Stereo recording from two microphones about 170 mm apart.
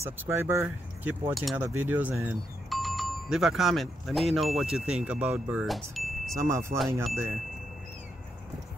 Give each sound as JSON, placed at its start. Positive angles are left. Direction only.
{"t": 0.0, "sound": "speech", "side_deg": -15}
{"t": 1.3, "sound": "speech", "side_deg": 0}
{"t": 1.6, "sound": "speech", "side_deg": -10}
{"t": 6.3, "sound": "speech", "side_deg": -20}